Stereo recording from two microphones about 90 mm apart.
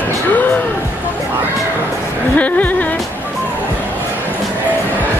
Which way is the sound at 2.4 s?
15° left (ahead or behind).